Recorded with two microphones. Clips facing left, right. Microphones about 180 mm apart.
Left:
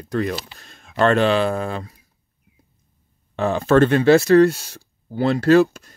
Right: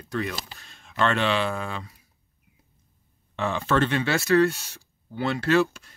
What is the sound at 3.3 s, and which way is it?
Speech, 40° left (ahead or behind).